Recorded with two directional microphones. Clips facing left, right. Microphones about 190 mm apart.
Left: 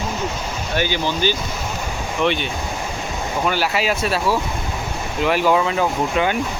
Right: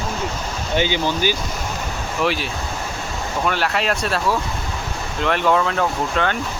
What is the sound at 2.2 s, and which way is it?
Speech, centre (ahead or behind).